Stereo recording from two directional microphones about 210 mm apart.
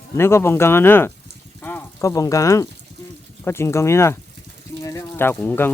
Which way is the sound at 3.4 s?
10° left (ahead or behind).